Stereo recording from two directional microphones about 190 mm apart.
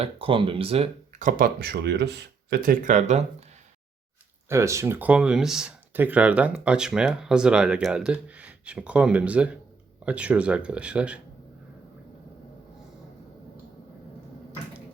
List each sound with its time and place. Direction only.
0.0 s speech: 30° right (ahead or behind)
4.4 s speech: 15° right (ahead or behind)